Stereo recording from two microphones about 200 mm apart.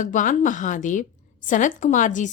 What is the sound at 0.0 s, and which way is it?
A woman's voice, 40° left (ahead or behind).